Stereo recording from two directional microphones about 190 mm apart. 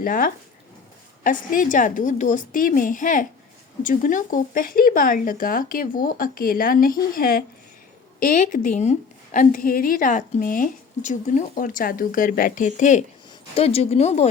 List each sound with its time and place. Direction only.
0.0 s a woman's voice: 45° left (ahead or behind)